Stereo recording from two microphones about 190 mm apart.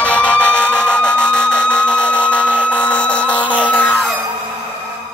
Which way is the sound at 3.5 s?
10° left (ahead or behind).